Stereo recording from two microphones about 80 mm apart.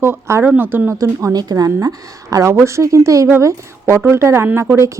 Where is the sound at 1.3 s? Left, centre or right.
Right.